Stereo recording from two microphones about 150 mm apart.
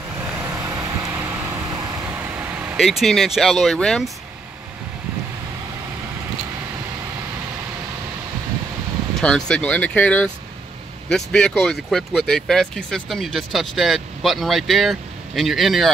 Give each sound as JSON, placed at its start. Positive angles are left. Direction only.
{"t": 0.4, "sound": "vehicle", "side_deg": -15}
{"t": 2.8, "sound": "speech", "side_deg": 0}
{"t": 9.2, "sound": "speech", "side_deg": 5}